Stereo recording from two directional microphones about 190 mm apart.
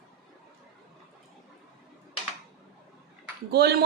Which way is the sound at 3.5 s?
55° right (ahead or behind).